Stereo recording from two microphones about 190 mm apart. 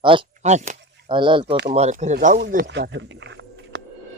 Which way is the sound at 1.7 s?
35° right (ahead or behind).